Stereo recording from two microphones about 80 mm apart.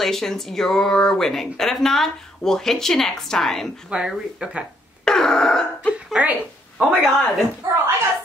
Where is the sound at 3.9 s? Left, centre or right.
Centre.